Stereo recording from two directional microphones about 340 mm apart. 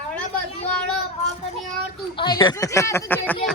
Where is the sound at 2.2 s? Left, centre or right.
Centre.